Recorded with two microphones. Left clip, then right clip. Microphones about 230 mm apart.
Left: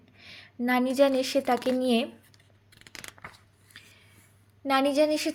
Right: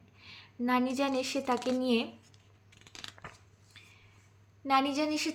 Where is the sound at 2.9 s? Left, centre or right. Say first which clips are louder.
Left 3 dB; left.